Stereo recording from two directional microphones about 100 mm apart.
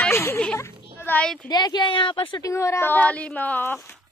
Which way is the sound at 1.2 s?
10° left (ahead or behind).